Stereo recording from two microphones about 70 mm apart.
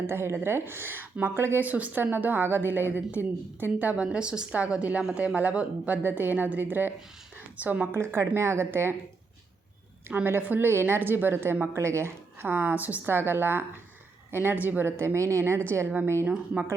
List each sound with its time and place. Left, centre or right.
0.1 s a woman's voice: right
7.9 s a woman's voice: right
10.1 s a woman's voice: right
16.2 s a woman's voice: right